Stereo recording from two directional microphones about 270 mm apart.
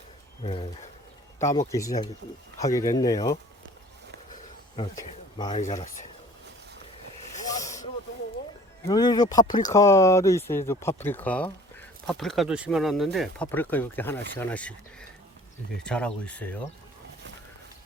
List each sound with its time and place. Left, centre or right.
0.4 s speech: centre
4.8 s speech: centre
7.4 s snake: centre
8.9 s speech: centre
15.8 s speech: centre